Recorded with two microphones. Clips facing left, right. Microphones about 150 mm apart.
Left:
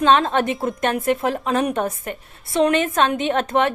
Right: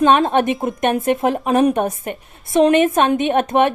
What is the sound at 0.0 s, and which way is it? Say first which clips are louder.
Speech: right 3 dB; 20° right (ahead or behind).